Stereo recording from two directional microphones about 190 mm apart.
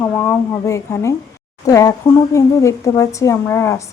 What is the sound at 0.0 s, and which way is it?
Speech, 10° left (ahead or behind).